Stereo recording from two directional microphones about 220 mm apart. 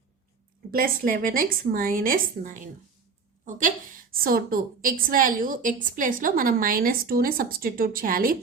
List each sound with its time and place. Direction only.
1.3 s a woman's voice: 40° right (ahead or behind)